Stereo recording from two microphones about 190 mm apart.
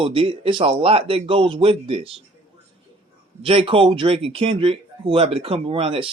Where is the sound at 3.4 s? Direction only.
30° right (ahead or behind).